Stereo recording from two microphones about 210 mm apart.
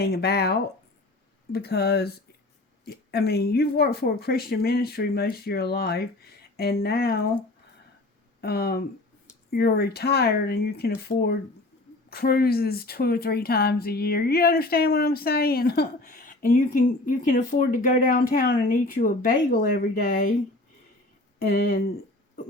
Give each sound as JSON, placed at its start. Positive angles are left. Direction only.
{"t": 0.0, "sound": "speech", "side_deg": 50}
{"t": 8.4, "sound": "speech", "side_deg": 50}
{"t": 21.4, "sound": "speech", "side_deg": 45}